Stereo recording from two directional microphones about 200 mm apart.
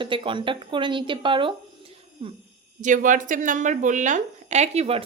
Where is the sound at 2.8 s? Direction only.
40° right (ahead or behind).